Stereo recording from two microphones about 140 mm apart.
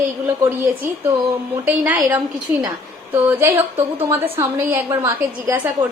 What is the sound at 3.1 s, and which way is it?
A woman's voice, 15° right (ahead or behind).